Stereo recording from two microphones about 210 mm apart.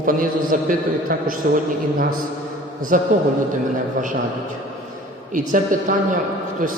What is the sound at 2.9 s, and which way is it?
Speech, 40° right (ahead or behind).